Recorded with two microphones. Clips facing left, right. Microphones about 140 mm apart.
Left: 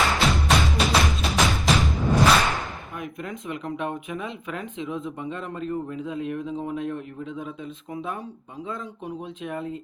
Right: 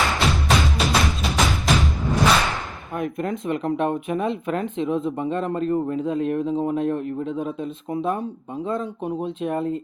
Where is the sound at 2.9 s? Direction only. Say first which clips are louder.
Right 11 dB; 55° right (ahead or behind).